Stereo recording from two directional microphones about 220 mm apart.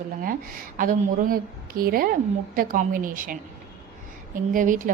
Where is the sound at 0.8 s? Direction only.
40° right (ahead or behind).